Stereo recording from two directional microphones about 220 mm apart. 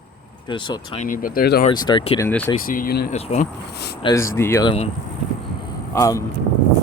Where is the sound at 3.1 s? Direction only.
30° left (ahead or behind).